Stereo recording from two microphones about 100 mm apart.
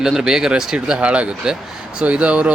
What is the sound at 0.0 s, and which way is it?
Speech, 5° right (ahead or behind).